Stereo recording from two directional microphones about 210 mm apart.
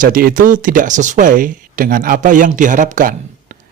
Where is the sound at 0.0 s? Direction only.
40° right (ahead or behind).